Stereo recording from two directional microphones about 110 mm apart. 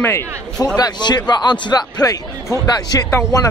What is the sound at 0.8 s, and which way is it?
A man's voice, 40° left (ahead or behind).